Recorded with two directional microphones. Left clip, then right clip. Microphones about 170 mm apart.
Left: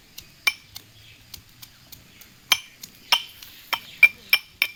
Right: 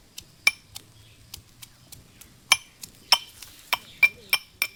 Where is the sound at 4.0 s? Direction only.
45° right (ahead or behind).